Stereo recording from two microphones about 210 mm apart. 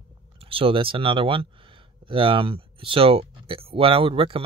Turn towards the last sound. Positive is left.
turn(degrees=-25)  # may be behind; listen again after turning